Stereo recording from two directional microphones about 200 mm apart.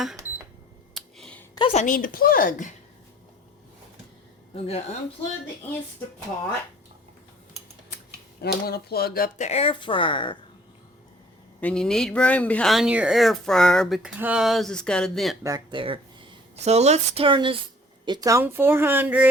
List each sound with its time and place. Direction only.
0.9 s a sound: centre (ahead or behind)
1.5 s a woman's voice: 30° left (ahead or behind)
4.5 s a woman's voice: 30° left (ahead or behind)
8.4 s speech: 50° left (ahead or behind)
9.5 s a woman's voice: 30° left (ahead or behind)
11.6 s speech: 5° left (ahead or behind)
15.4 s speech: 20° right (ahead or behind)